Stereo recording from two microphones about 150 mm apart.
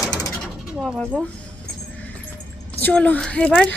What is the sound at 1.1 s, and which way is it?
Speech, 5° left (ahead or behind).